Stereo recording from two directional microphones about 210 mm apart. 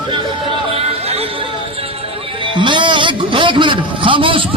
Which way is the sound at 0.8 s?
30° right (ahead or behind).